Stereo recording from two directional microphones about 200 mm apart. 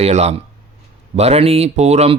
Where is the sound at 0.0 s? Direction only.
30° right (ahead or behind).